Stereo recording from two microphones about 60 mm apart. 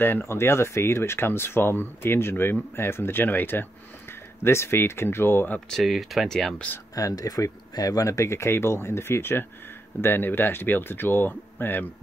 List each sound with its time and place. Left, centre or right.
0.0 s speech: left
4.4 s speech: left
5.7 s speech: centre
7.0 s speech: left